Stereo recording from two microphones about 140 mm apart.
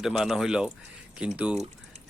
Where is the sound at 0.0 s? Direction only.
Centre (ahead or behind).